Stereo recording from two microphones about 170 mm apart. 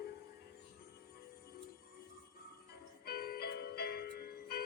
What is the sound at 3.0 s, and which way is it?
Music, 65° left (ahead or behind).